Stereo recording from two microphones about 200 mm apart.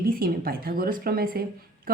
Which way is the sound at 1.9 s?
45° right (ahead or behind).